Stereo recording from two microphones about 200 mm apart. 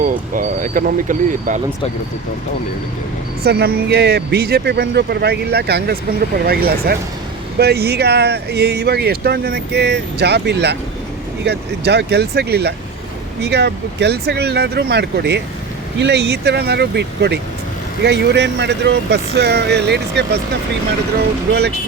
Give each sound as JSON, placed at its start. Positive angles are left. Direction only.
{"t": 0.0, "sound": "speech", "side_deg": -40}
{"t": 3.4, "sound": "speech", "side_deg": -50}